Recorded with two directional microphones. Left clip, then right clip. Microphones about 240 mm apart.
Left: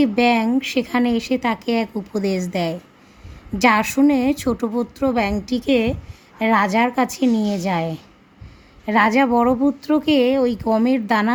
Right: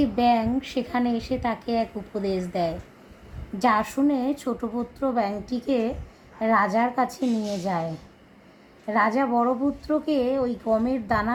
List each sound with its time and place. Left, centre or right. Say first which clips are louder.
0.2 s speech: left 2 dB; left
8.9 s speech: left 6 dB; left